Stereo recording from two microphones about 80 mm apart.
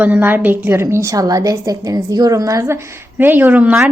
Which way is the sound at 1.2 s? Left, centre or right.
Right.